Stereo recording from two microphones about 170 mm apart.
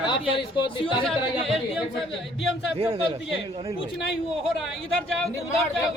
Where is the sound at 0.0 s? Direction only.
30° left (ahead or behind).